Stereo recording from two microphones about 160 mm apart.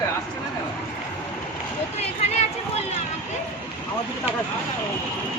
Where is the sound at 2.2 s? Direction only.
40° left (ahead or behind).